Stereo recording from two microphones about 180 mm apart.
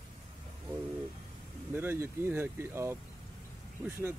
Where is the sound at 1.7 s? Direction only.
15° right (ahead or behind).